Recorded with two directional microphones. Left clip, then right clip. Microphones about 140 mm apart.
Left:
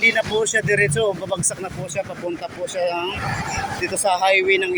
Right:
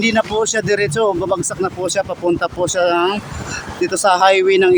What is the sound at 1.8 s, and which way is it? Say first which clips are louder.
Speech: right 8 dB; 55° right (ahead or behind).